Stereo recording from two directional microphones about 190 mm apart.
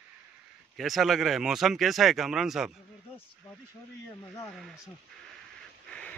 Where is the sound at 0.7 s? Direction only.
Centre (ahead or behind).